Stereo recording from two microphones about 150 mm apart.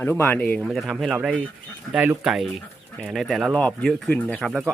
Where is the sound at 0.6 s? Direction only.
5° right (ahead or behind).